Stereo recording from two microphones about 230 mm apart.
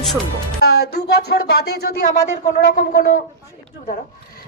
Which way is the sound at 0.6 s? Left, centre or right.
Left.